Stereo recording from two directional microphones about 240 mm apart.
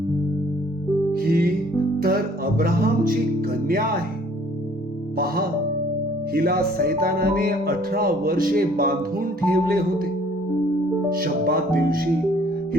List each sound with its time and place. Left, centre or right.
1.1 s music: right
5.1 s music: right
11.1 s music: right